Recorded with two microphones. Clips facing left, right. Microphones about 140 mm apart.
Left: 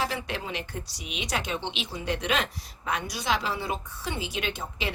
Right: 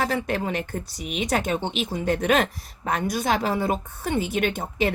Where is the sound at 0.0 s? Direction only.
50° right (ahead or behind).